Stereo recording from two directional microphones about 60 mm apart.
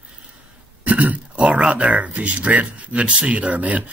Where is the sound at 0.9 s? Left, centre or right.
Right.